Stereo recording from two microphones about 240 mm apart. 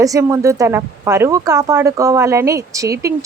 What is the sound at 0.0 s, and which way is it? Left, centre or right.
A woman's voice, centre.